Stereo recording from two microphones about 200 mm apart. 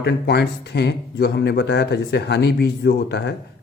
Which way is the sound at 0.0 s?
55° left (ahead or behind).